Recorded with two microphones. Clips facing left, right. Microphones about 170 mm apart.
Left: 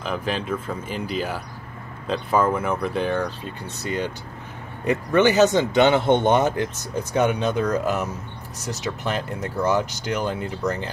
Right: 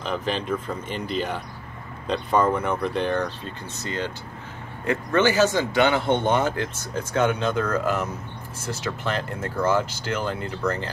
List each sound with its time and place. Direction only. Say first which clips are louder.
0.0 s speech: even; 5° left (ahead or behind)